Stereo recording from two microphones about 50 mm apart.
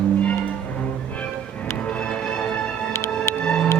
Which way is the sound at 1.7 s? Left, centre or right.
Left.